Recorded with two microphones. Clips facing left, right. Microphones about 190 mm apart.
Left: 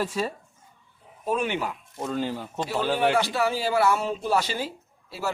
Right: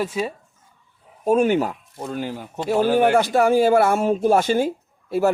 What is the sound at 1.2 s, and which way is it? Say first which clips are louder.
Speech: right 9 dB; 45° right (ahead or behind).